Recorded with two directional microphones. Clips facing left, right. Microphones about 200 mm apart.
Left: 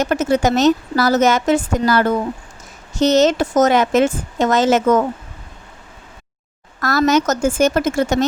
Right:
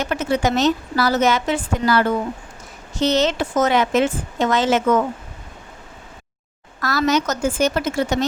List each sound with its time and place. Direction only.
0.0 s a woman's voice: 45° left (ahead or behind)
6.8 s a woman's voice: 45° left (ahead or behind)